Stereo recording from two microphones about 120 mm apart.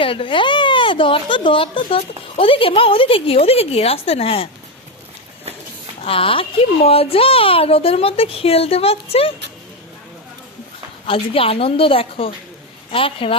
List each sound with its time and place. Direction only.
0.0 s speech: 45° left (ahead or behind)
6.0 s speech: 50° left (ahead or behind)
11.0 s speech: 50° left (ahead or behind)